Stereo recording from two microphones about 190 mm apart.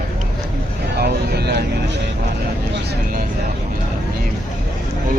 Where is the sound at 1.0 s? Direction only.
60° right (ahead or behind).